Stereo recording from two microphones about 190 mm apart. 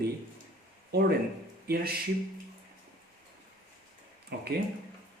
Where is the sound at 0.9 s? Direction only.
60° right (ahead or behind).